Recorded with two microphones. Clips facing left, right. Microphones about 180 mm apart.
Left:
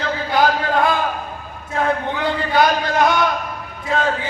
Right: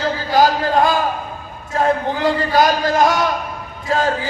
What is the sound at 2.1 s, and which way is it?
Speech, 40° right (ahead or behind).